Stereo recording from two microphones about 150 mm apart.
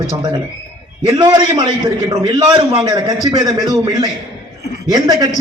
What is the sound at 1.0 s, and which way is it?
A man's voice, 30° right (ahead or behind).